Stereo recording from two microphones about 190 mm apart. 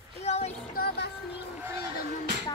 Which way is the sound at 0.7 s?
55° left (ahead or behind).